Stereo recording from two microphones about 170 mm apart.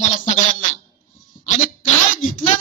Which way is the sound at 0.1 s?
50° left (ahead or behind).